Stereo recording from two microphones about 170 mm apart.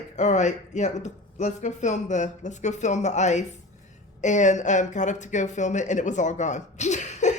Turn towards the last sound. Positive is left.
turn(degrees=45)  # may be behind; listen again after turning